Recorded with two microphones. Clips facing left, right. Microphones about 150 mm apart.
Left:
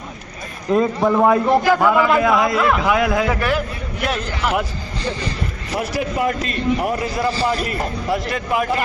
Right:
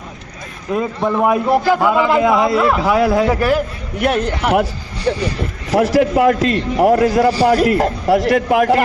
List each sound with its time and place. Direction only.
0.7 s speech: centre (ahead or behind)
1.2 s a man's voice: 10° right (ahead or behind); by 3.6 s 35° right (ahead or behind)
4.0 s a man's voice: 60° right (ahead or behind)
5.7 s a man's voice: 90° right